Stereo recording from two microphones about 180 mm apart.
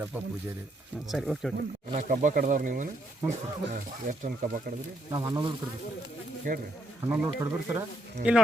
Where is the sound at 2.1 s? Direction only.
50° right (ahead or behind).